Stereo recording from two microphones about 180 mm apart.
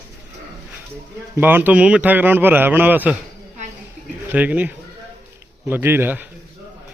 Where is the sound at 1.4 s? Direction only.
10° right (ahead or behind).